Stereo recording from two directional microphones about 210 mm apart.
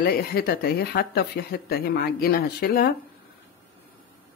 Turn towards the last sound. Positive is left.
turn(degrees=45)  # may be behind; listen again after turning